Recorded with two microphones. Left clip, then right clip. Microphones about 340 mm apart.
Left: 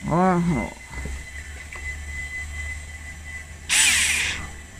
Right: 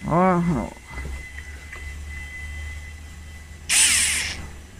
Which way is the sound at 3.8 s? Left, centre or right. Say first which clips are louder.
Left 2 dB; centre.